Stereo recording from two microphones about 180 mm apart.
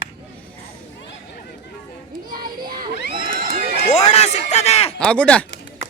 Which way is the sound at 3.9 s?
40° left (ahead or behind).